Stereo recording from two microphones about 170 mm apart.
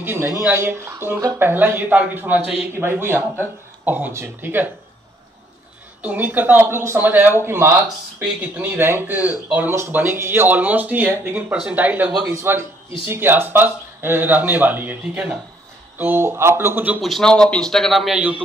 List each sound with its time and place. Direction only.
0.0 s speech: 15° right (ahead or behind)
6.0 s speech: 10° right (ahead or behind)
17.1 s a man's voice: 5° left (ahead or behind)